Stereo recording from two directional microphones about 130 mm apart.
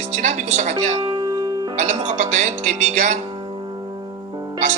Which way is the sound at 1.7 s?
60° right (ahead or behind).